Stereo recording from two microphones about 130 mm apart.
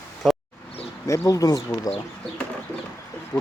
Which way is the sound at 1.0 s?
25° left (ahead or behind).